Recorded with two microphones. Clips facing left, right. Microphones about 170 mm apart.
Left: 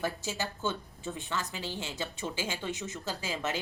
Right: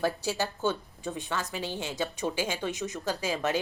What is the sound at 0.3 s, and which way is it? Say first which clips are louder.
A woman's voice: right 5 dB; 15° right (ahead or behind).